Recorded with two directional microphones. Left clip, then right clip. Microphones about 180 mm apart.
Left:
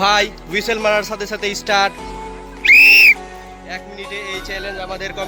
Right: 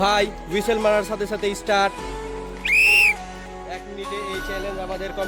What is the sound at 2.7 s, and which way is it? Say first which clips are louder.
Whistle: left 8 dB; 10° right (ahead or behind).